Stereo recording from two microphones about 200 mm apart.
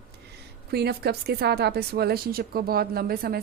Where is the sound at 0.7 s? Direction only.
55° right (ahead or behind).